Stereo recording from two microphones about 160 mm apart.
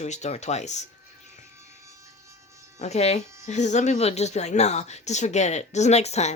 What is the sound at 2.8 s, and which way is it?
Speech, 45° left (ahead or behind).